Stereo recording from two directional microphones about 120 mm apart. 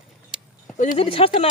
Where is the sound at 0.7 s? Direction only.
90° left.